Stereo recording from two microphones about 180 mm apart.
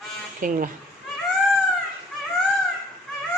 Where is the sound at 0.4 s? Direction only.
45° right (ahead or behind).